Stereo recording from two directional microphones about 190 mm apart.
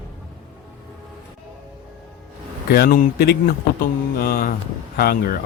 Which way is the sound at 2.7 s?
50° left (ahead or behind).